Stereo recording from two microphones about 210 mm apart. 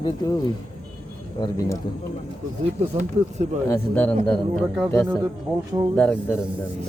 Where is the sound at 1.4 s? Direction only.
20° left (ahead or behind).